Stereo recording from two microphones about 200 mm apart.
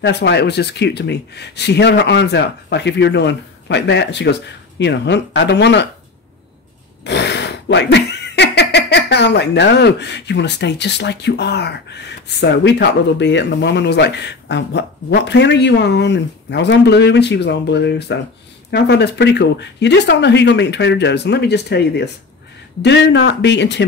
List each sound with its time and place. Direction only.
0.0 s speech: 55° left (ahead or behind)
7.1 s speech: 60° left (ahead or behind)